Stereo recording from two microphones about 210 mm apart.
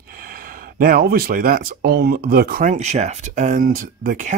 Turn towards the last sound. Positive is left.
turn(degrees=-40)  # may be behind; listen again after turning